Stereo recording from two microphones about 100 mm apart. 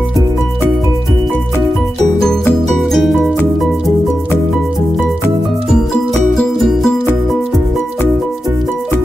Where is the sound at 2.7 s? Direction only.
Centre (ahead or behind).